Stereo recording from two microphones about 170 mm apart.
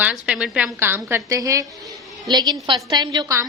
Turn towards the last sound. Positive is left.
turn(degrees=-20)  # may be behind; listen again after turning